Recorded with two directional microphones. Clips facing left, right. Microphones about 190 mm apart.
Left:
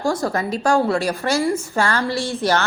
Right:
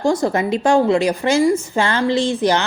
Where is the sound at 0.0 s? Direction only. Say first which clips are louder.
Right 4 dB; 20° right (ahead or behind).